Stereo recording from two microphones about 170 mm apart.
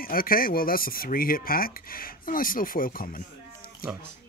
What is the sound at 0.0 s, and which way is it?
Speech, 60° left (ahead or behind).